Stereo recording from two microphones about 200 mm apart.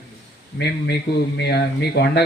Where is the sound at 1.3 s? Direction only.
55° left (ahead or behind).